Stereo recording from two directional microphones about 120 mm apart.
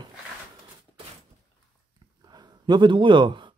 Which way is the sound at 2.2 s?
35° right (ahead or behind).